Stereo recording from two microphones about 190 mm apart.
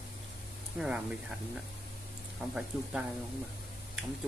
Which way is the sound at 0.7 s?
5° right (ahead or behind).